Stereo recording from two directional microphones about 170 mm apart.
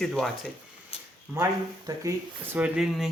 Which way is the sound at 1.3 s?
20° right (ahead or behind).